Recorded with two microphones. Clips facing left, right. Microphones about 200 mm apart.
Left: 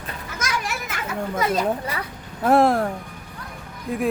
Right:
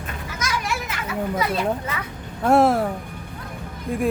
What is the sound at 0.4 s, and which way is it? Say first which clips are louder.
Children playing: right 1 dB; 50° left (ahead or behind).